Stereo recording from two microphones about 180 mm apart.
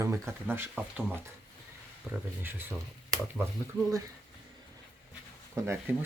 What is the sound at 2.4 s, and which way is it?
Speech, 10° right (ahead or behind).